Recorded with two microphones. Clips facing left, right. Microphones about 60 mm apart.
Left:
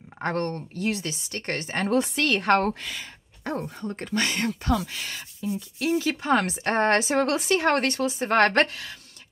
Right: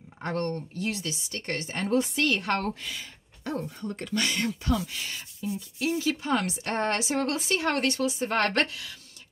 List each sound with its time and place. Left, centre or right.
0.2 s speech: left
3.4 s a woman's voice: left
7.2 s speech: left
7.4 s a woman's voice: left